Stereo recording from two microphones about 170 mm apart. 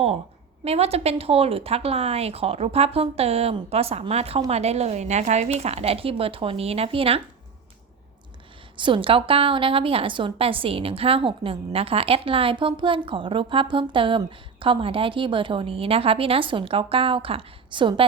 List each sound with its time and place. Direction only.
0.6 s a woman's voice: 35° right (ahead or behind)
8.7 s a woman's voice: 30° right (ahead or behind)